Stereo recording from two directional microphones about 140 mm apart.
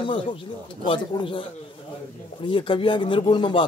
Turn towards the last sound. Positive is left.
turn(degrees=35)  # may be behind; listen again after turning